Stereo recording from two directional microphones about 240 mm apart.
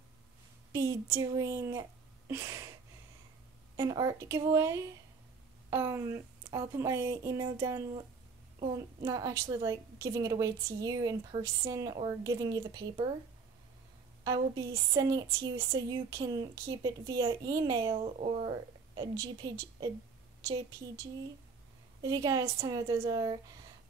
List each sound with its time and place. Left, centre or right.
0.7 s speech: centre
3.7 s a woman's voice: centre
9.0 s a woman's voice: centre
14.2 s a woman's voice: centre
22.0 s a woman's voice: centre